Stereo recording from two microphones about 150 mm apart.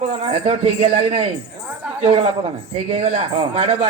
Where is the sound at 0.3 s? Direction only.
40° right (ahead or behind).